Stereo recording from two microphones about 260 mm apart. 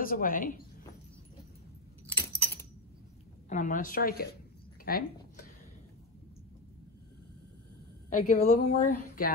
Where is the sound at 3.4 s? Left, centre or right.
Left.